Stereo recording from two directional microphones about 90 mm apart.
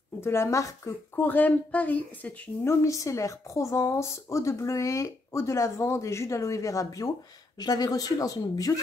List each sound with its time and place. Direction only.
0.2 s speech: 30° left (ahead or behind)
1.2 s speech: 20° left (ahead or behind)
2.6 s speech: 30° left (ahead or behind)